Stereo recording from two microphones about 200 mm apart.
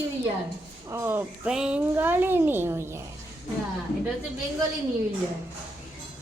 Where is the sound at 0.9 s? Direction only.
10° right (ahead or behind).